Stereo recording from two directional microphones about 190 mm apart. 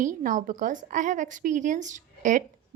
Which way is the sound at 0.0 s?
45° right (ahead or behind).